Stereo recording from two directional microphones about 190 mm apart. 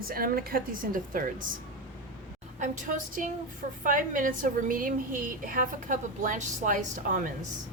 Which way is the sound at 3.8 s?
45° right (ahead or behind).